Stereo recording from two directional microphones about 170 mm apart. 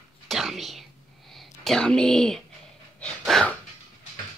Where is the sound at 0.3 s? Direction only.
Centre (ahead or behind).